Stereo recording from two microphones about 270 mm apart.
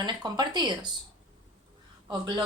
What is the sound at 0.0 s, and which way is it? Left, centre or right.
Speech, centre.